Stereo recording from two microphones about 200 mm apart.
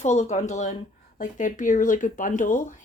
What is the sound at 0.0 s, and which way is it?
Speech, 35° left (ahead or behind).